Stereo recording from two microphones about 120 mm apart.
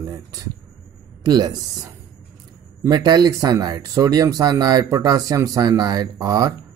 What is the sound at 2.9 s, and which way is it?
Speech, 35° right (ahead or behind).